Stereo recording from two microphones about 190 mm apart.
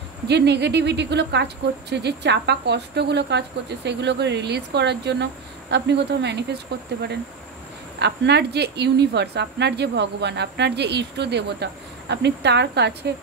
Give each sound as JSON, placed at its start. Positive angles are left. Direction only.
{"t": 0.3, "sound": "speech", "side_deg": -60}
{"t": 8.0, "sound": "speech", "side_deg": -60}